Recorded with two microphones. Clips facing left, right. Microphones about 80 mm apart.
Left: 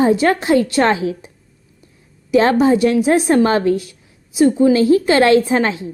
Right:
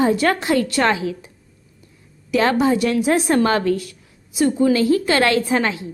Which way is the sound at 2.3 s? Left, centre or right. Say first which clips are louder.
Left 4 dB; left.